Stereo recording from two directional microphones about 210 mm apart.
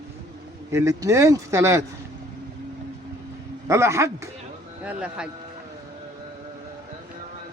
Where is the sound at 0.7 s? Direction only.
15° right (ahead or behind).